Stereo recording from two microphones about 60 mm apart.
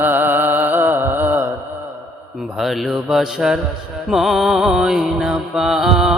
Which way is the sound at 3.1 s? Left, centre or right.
Centre.